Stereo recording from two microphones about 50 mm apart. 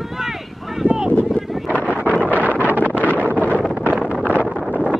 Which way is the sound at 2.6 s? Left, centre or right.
Right.